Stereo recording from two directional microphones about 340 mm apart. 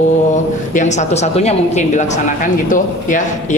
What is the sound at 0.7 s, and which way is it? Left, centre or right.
Speech, left.